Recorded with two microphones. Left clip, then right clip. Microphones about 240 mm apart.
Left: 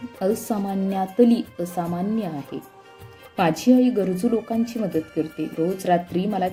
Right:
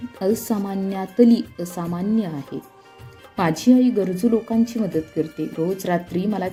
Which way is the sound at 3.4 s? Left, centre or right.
Right.